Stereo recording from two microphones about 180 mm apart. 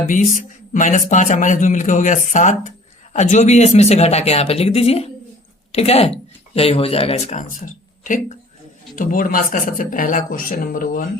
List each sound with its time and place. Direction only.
0.7 s a man's voice: 45° left (ahead or behind)